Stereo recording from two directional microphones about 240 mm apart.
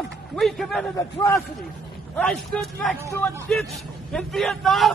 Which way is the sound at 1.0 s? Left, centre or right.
Centre.